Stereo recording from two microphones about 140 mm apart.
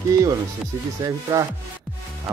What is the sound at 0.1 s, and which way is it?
Speech, 25° right (ahead or behind).